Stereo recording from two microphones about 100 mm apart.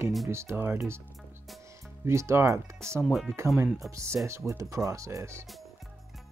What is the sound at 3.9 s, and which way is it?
Speech, 30° right (ahead or behind).